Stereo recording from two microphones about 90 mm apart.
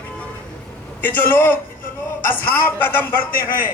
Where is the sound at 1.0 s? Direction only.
20° left (ahead or behind).